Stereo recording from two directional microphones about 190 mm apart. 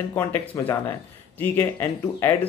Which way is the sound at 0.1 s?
10° left (ahead or behind).